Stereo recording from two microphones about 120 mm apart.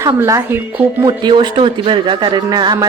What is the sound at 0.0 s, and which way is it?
Speech, 25° right (ahead or behind).